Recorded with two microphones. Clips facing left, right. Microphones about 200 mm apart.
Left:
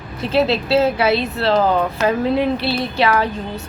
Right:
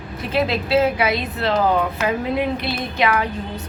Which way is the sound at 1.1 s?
35° left (ahead or behind).